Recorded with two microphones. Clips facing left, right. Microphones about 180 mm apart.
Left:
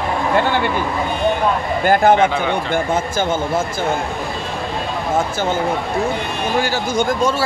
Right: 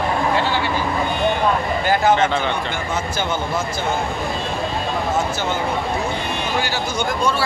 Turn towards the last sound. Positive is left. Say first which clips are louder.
# left 4 dB
turn(degrees=45)  # may be behind; listen again after turning